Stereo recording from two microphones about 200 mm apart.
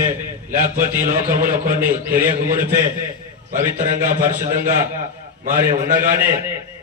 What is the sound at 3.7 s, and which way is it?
Speech, 40° right (ahead or behind).